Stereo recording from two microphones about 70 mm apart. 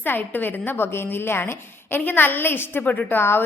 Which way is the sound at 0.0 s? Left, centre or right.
Left.